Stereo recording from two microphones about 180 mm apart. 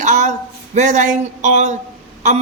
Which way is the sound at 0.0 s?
45° right (ahead or behind).